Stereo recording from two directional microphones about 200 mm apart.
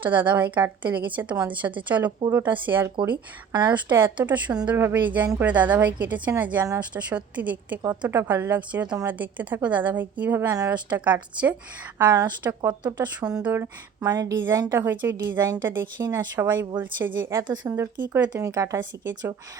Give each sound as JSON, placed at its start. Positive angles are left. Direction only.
{"t": 0.0, "sound": "a woman's voice", "side_deg": -10}
{"t": 3.0, "sound": "speech", "side_deg": -25}
{"t": 4.2, "sound": "a woman's voice", "side_deg": -5}